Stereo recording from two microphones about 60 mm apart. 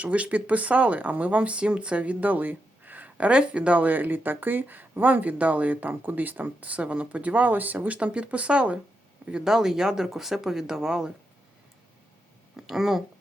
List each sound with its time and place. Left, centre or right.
0.0 s speech: right
12.5 s speech: centre